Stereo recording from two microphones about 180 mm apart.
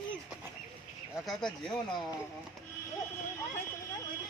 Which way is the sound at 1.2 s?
5° left (ahead or behind).